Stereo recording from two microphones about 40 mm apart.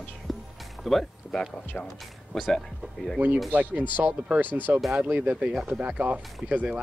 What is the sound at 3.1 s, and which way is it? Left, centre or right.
Speech, right.